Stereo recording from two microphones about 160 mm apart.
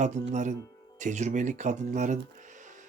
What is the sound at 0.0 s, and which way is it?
Speech, 45° right (ahead or behind).